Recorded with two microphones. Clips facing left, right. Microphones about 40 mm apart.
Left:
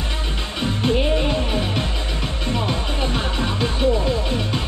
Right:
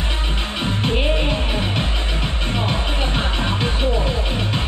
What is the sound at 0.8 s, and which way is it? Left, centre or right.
Music, right.